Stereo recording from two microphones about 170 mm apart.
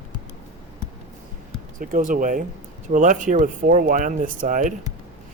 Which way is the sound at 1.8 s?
50° right (ahead or behind).